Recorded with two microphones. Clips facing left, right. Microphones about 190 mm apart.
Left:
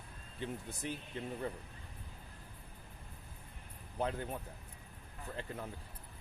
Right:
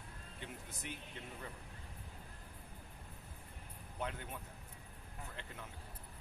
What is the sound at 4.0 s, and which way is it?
Speech, 35° left (ahead or behind).